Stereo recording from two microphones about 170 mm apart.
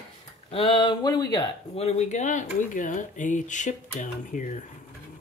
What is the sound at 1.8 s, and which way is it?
Speech, 40° left (ahead or behind).